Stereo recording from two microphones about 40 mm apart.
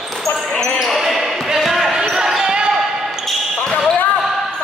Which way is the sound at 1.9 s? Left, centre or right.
Centre.